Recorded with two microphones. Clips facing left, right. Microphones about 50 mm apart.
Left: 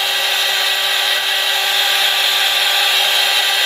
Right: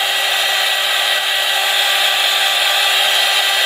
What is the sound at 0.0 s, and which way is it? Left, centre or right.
Hair dryer, centre.